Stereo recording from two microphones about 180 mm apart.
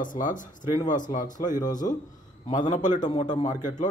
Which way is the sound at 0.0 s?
45° left (ahead or behind).